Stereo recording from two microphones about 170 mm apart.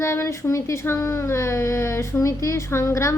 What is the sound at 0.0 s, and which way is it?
Speech, 15° left (ahead or behind).